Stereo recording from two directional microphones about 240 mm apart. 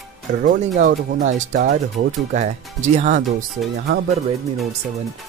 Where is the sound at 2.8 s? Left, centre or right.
Right.